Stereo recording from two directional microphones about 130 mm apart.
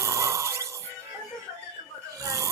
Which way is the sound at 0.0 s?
25° right (ahead or behind).